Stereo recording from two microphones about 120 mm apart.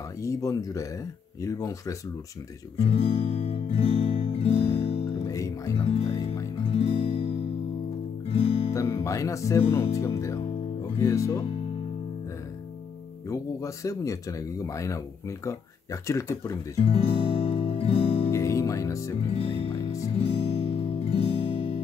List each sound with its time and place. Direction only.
0.2 s speech: 25° left (ahead or behind)
2.9 s music: 55° left (ahead or behind)
5.3 s music: 25° left (ahead or behind)
6.7 s guitar: 55° left (ahead or behind)
8.3 s music: 55° left (ahead or behind)
8.7 s speech: 25° left (ahead or behind)
13.3 s speech: 25° left (ahead or behind)
16.8 s music: 50° left (ahead or behind)
18.3 s music: 25° left (ahead or behind)
19.3 s music: 55° left (ahead or behind)